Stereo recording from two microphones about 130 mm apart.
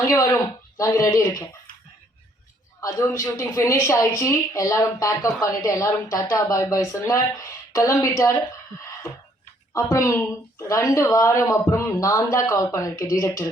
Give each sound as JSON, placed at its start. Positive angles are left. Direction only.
{"t": 0.0, "sound": "speech", "side_deg": 25}
{"t": 3.1, "sound": "speech", "side_deg": 20}
{"t": 9.7, "sound": "speech", "side_deg": 25}